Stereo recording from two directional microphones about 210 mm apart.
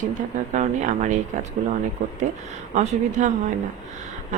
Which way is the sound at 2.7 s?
35° right (ahead or behind).